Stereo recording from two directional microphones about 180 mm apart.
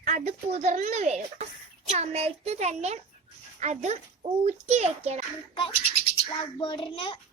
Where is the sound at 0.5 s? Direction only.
40° right (ahead or behind).